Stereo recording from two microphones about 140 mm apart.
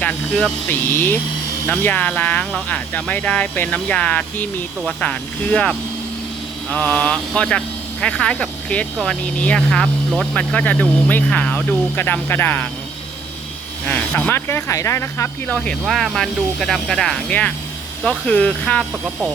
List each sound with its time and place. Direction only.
0.0 s speech: 5° left (ahead or behind)
13.8 s speech: 10° left (ahead or behind)
15.4 s speech: 5° left (ahead or behind)